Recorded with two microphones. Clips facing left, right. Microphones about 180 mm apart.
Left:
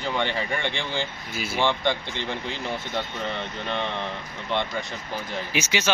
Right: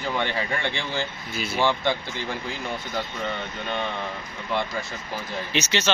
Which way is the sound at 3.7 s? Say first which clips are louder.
Even; 5° right (ahead or behind).